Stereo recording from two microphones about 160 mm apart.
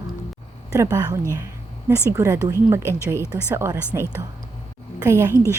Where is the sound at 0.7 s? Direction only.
20° right (ahead or behind).